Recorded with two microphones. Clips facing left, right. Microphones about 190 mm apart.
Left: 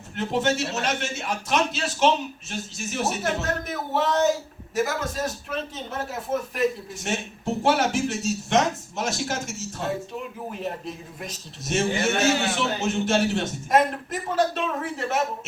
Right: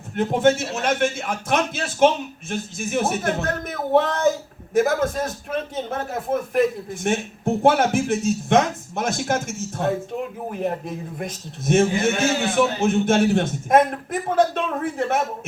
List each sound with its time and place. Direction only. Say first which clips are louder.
0.2 s a man's voice: right 6 dB; 50° right (ahead or behind)